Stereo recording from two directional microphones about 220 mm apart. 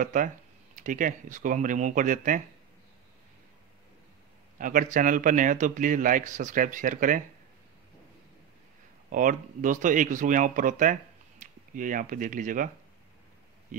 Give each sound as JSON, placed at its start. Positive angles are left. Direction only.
{"t": 0.0, "sound": "speech", "side_deg": -35}
{"t": 4.6, "sound": "speech", "side_deg": -35}
{"t": 9.1, "sound": "speech", "side_deg": -35}